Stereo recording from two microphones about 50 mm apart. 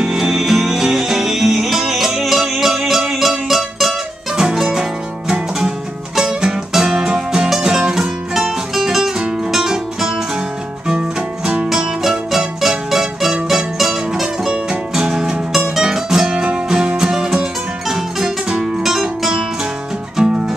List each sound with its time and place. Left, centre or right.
0.0 s music: centre
4.4 s music: centre
6.1 s music: centre
11.0 s music: right
11.7 s music: centre
14.5 s music: centre